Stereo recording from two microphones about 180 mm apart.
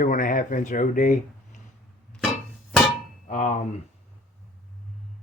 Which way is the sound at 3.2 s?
40° left (ahead or behind).